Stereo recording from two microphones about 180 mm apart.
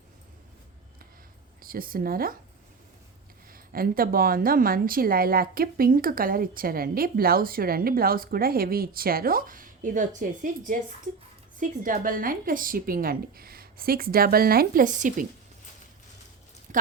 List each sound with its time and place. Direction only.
1.6 s a woman's voice: 55° right (ahead or behind)
3.5 s a woman's voice: 55° right (ahead or behind)
11.8 s a woman's voice: 50° right (ahead or behind)